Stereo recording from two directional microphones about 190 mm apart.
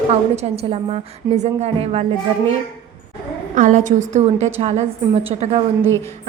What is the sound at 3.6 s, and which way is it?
A woman's voice, 45° right (ahead or behind).